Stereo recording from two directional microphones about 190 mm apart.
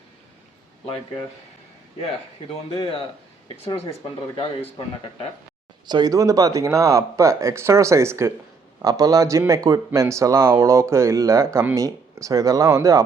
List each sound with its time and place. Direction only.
2.5 s speech: 25° left (ahead or behind)
5.8 s a man's voice: 20° right (ahead or behind)